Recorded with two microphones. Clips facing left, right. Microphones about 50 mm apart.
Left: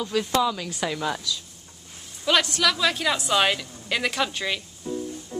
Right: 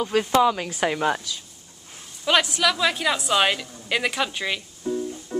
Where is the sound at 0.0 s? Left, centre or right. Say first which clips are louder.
Right 4 dB; right.